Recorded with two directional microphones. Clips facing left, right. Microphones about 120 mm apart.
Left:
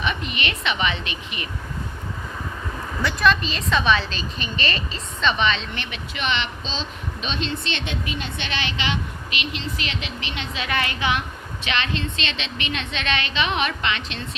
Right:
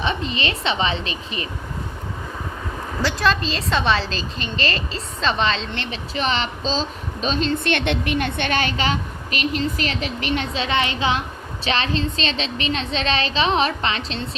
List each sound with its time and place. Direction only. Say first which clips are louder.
0.0 s a woman's voice: right 3 dB; 30° right (ahead or behind)
3.0 s a woman's voice: even; 30° right (ahead or behind)
10.5 s a woman's voice: right 4 dB; 25° right (ahead or behind)